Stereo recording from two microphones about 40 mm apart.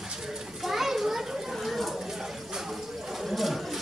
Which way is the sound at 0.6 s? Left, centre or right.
Centre.